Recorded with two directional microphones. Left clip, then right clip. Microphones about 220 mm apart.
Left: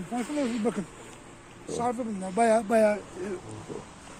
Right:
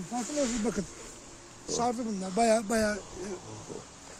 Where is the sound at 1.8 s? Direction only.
55° right (ahead or behind).